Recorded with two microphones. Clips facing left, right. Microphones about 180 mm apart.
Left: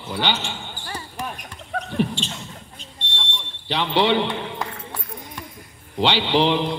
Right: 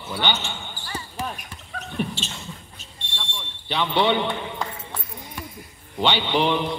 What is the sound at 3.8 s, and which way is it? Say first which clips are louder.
Speech: left 2 dB; 30° left (ahead or behind).